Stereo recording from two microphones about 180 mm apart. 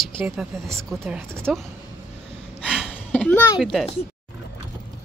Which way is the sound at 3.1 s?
10° left (ahead or behind).